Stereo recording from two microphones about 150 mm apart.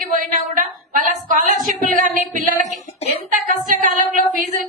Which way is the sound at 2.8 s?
45° left (ahead or behind).